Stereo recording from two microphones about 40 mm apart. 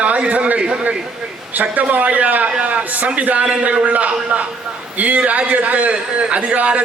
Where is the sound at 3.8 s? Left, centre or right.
Right.